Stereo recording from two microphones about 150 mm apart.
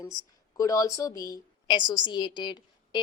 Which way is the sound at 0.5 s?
25° left (ahead or behind).